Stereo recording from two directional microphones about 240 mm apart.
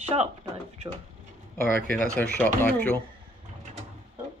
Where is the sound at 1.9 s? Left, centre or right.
Centre.